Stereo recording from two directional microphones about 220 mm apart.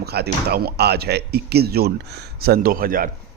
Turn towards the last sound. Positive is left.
turn(degrees=-40)  # may be behind; listen again after turning